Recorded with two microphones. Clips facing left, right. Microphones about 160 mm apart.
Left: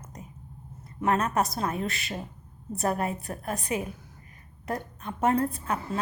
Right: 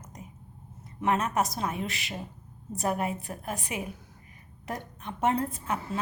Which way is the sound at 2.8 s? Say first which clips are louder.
Left 1 dB; 15° right (ahead or behind).